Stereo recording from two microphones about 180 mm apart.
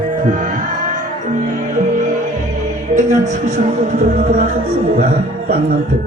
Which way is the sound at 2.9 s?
40° right (ahead or behind).